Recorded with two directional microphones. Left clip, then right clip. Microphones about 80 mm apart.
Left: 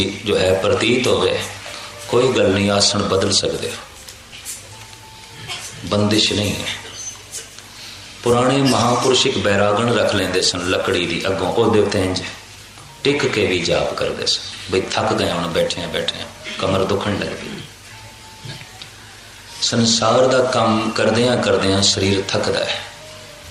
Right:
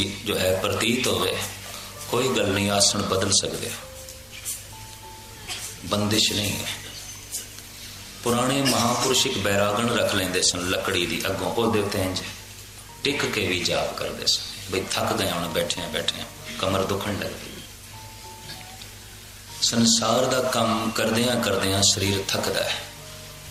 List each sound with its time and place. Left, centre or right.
0.0 s speech: centre
5.9 s speech: centre
8.2 s speech: centre
19.5 s speech: centre